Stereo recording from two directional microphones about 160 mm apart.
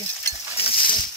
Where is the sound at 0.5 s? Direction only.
35° left (ahead or behind).